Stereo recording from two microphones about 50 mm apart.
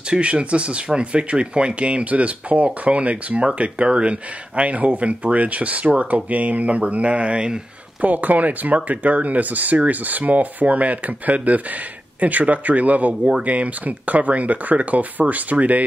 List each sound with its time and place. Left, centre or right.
0.1 s speech: right